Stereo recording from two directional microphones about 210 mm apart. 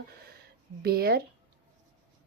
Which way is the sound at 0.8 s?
45° right (ahead or behind).